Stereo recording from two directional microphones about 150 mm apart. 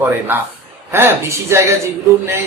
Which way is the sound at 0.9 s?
15° right (ahead or behind).